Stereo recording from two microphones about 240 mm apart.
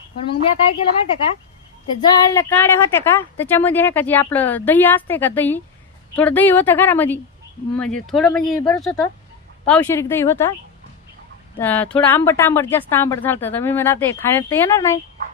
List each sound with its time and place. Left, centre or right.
0.3 s a woman's voice: left
2.0 s a woman's voice: centre
11.6 s a woman's voice: centre